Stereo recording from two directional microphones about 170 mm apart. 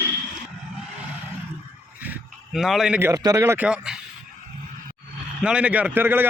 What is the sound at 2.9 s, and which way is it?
Speech, 15° right (ahead or behind).